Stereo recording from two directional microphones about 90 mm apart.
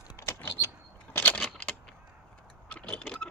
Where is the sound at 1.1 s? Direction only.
20° left (ahead or behind).